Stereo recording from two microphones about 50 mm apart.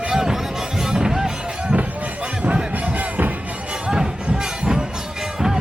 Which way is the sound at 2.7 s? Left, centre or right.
Right.